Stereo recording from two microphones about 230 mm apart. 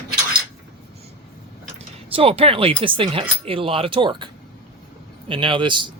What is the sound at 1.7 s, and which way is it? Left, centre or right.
A man's voice, right.